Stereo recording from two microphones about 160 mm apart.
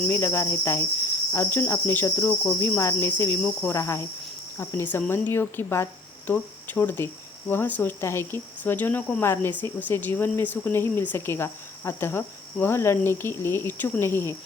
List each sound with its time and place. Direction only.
0.1 s speech: 15° left (ahead or behind)